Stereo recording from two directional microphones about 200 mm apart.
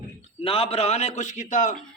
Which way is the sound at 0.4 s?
30° left (ahead or behind).